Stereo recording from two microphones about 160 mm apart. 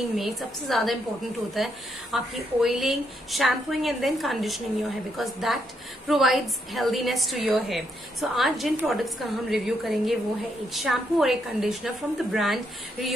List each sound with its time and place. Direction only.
0.1 s speech: centre (ahead or behind)